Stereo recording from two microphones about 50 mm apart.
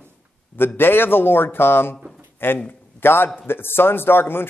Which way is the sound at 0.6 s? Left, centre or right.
Left.